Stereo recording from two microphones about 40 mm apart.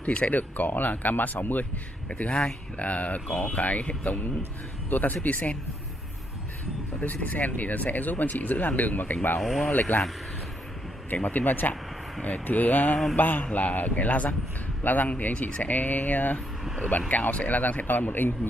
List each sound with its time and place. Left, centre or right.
0.0 s speech: left
0.3 s speech: left
2.0 s speech: left
7.0 s speech: left
9.4 s speech: centre
9.7 s speech: left
11.1 s speech: left
16.6 s vehicle: centre
17.1 s speech: left